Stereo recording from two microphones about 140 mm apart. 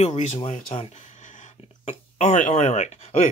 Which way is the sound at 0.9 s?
55° left (ahead or behind).